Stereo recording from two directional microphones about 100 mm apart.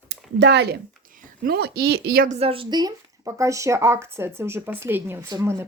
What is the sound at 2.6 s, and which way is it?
A woman's voice, 40° right (ahead or behind).